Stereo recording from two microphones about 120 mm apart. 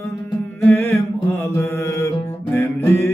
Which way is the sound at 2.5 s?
20° left (ahead or behind).